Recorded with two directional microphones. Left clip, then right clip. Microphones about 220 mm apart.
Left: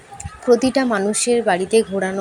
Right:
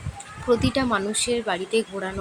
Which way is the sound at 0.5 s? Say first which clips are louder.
Left 6 dB; 15° left (ahead or behind).